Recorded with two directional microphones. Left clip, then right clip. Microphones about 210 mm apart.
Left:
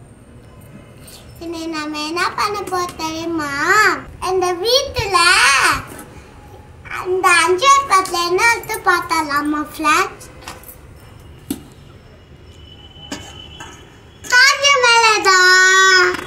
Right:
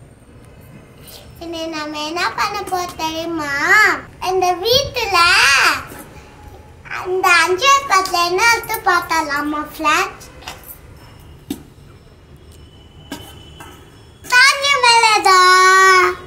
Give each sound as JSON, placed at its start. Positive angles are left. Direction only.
{"t": 1.4, "sound": "a child's voice", "side_deg": -10}
{"t": 6.8, "sound": "a child's voice", "side_deg": -5}
{"t": 14.2, "sound": "child singing", "side_deg": -15}